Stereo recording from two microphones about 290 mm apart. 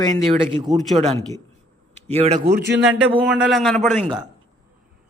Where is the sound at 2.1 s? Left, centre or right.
Right.